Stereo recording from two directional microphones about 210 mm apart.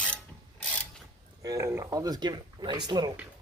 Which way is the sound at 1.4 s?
15° right (ahead or behind).